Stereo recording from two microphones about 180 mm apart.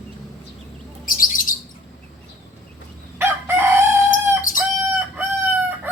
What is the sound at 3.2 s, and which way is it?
Chicken, 15° right (ahead or behind).